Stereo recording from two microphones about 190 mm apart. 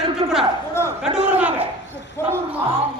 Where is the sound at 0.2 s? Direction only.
25° right (ahead or behind).